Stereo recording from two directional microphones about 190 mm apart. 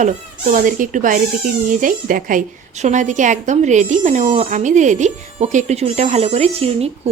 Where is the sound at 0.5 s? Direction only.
45° right (ahead or behind).